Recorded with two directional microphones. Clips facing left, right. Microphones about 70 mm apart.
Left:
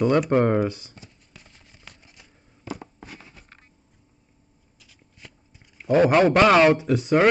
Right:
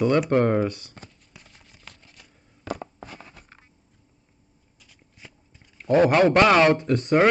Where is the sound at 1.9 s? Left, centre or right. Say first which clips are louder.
Even; centre.